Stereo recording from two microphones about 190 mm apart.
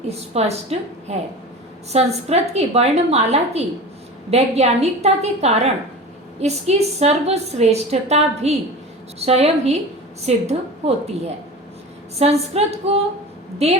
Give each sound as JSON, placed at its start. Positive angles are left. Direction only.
{"t": 0.1, "sound": "a woman's voice", "side_deg": -35}
{"t": 12.2, "sound": "a woman's voice", "side_deg": -35}